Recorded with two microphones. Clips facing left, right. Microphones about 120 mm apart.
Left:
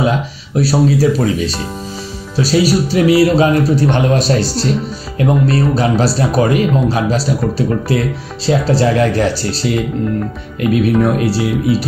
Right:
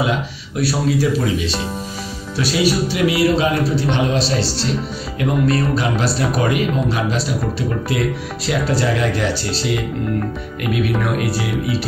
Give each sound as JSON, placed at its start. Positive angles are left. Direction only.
{"t": 0.6, "sound": "speech", "side_deg": 35}
{"t": 10.6, "sound": "speech", "side_deg": 35}